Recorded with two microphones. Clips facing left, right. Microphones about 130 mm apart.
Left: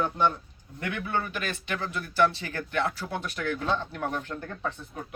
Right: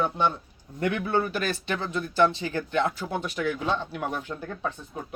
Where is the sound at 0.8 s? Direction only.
35° right (ahead or behind); by 4.7 s 10° right (ahead or behind).